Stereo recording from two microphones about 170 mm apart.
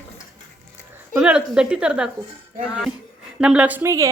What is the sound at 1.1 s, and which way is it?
Speech, 5° right (ahead or behind).